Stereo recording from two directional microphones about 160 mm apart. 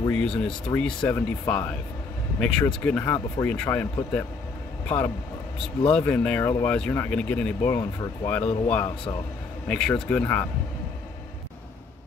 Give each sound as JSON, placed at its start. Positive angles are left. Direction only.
{"t": 0.7, "sound": "speech", "side_deg": 10}